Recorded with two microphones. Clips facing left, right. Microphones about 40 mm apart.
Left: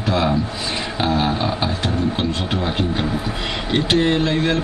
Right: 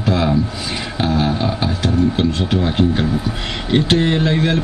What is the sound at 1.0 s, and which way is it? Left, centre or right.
Speech, left.